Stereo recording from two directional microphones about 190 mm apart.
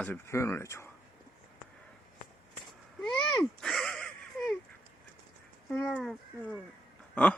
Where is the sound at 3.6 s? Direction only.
Centre (ahead or behind).